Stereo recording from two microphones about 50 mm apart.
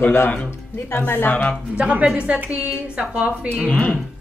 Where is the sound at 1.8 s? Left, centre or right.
Right.